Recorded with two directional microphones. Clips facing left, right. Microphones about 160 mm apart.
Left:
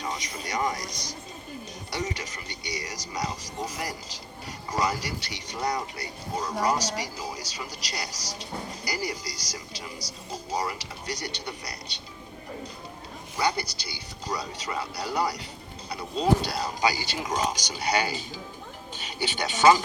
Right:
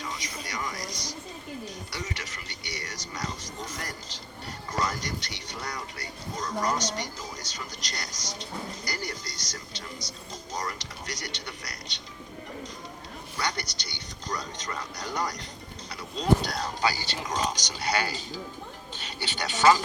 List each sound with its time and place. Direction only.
1.9 s a man's voice: 15° left (ahead or behind)
13.3 s a man's voice: 10° left (ahead or behind)